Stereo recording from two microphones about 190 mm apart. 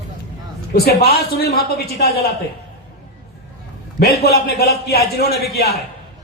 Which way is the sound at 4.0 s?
55° left (ahead or behind).